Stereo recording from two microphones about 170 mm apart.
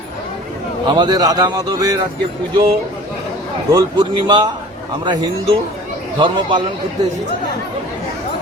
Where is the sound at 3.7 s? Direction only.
25° right (ahead or behind).